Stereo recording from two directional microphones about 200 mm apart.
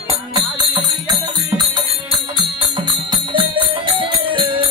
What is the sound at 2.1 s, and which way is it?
Music, 25° right (ahead or behind).